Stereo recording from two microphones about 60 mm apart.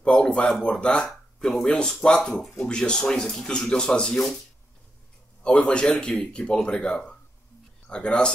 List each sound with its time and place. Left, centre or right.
0.0 s a sound: centre
0.7 s speech: centre
5.4 s speech: centre